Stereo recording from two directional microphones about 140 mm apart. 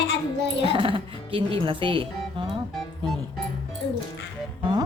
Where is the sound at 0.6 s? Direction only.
40° right (ahead or behind).